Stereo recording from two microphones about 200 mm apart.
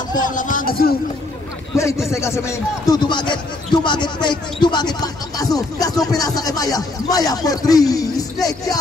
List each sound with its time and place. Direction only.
0.1 s speech: 40° left (ahead or behind)
2.0 s speech: 15° left (ahead or behind)